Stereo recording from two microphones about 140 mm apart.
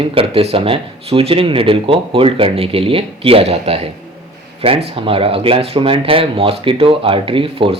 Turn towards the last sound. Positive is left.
turn(degrees=-40)  # may be behind; listen again after turning